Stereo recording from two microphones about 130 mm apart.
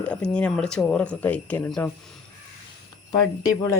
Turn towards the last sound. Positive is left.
turn(degrees=30)  # may be behind; listen again after turning